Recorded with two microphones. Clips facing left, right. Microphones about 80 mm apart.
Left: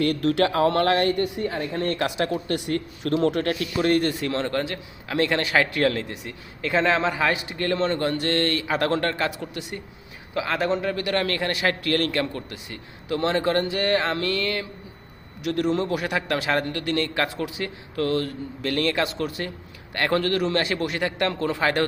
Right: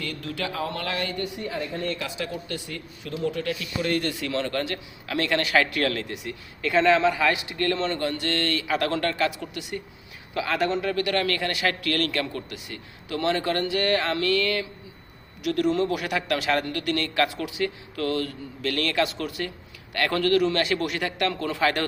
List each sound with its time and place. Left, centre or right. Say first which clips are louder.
0.0 s a man's voice: left 11 dB; left
10.3 s a man's voice: left 1 dB; centre
15.4 s a man's voice: even; left